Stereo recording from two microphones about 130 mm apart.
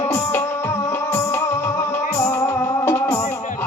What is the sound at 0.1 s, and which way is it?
Music, 15° left (ahead or behind).